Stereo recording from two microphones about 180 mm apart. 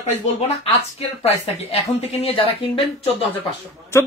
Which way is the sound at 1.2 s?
35° left (ahead or behind).